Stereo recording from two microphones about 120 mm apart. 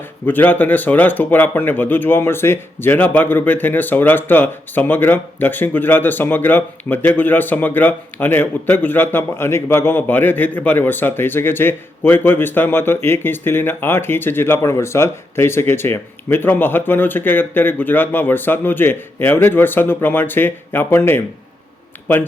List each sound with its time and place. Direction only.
0.3 s speech: 15° left (ahead or behind)